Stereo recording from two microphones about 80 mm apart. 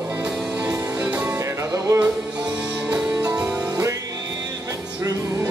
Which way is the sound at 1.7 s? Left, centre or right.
Right.